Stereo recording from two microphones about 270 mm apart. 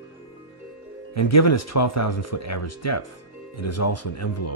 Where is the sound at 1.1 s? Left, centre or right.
Left.